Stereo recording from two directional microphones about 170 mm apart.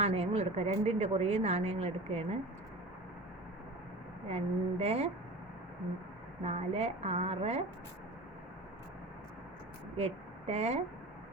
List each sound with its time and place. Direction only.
0.0 s speech: 35° right (ahead or behind)
4.3 s speech: 35° right (ahead or behind)
6.4 s speech: 35° right (ahead or behind)
10.0 s a woman's voice: 40° right (ahead or behind)